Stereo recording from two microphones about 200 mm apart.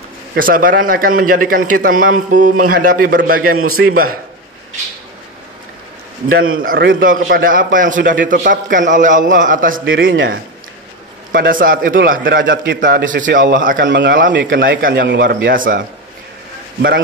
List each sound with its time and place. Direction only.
0.3 s a man's voice: 45° right (ahead or behind)
3.5 s a man's voice: 90° right
3.9 s a man's voice: 45° right (ahead or behind)
6.6 s a man's voice: 45° right (ahead or behind)
10.0 s speech: 70° right (ahead or behind)
11.3 s a man's voice: 45° right (ahead or behind)
13.8 s a man's voice: 60° right (ahead or behind); by 15.8 s 45° right (ahead or behind)